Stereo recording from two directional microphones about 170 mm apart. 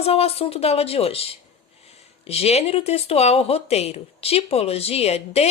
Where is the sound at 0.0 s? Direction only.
35° left (ahead or behind).